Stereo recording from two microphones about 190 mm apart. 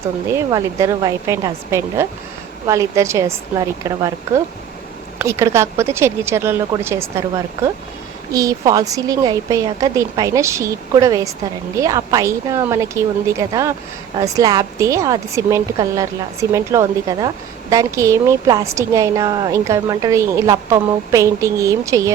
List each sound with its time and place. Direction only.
0.3 s a woman's voice: 15° right (ahead or behind)